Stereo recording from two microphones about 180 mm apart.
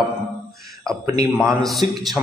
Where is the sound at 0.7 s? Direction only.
5° left (ahead or behind).